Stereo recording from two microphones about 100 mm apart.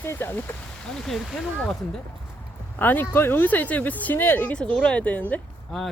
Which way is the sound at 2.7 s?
20° left (ahead or behind).